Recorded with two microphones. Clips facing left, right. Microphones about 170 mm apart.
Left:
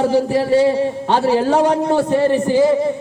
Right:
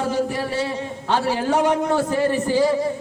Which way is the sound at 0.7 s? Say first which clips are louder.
Left 7 dB; 30° left (ahead or behind).